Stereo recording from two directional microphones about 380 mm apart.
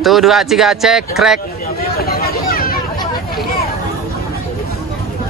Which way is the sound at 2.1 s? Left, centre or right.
Left.